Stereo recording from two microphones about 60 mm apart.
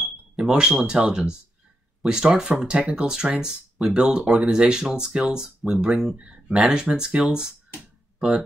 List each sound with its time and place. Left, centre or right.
0.4 s speech: centre